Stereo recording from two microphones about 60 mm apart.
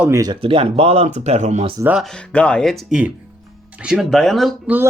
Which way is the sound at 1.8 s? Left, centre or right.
Right.